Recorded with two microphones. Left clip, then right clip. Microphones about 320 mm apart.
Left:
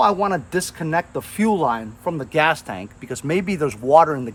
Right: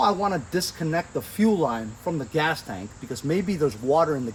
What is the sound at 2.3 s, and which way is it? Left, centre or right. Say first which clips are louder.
Speech: left 8 dB; left.